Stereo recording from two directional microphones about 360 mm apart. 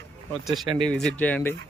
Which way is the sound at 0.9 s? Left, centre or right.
Centre.